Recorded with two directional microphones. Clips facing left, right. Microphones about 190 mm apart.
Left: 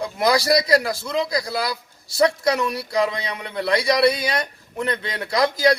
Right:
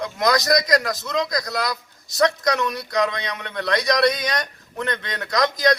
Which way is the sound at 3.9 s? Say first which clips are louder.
Left 1 dB; 5° left (ahead or behind).